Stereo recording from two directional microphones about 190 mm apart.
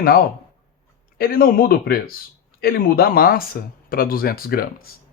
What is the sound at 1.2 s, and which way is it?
Speech, 50° left (ahead or behind).